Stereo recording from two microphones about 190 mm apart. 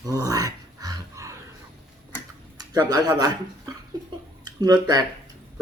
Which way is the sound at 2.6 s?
20° right (ahead or behind).